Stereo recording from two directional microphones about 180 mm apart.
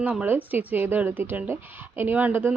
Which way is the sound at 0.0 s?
10° right (ahead or behind).